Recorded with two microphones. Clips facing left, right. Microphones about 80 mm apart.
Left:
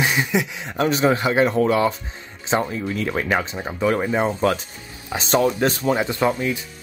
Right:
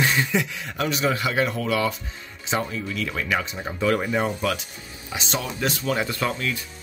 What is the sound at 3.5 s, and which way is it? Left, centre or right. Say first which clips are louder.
Speech: left 2 dB; centre.